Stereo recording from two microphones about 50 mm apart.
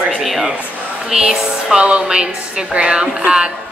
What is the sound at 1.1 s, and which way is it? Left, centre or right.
A woman's voice, centre.